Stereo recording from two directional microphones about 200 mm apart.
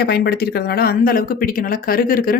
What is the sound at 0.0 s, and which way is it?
Speech, 50° left (ahead or behind).